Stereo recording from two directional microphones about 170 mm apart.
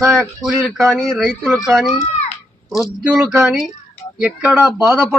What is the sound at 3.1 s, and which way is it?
Speech, 5° right (ahead or behind).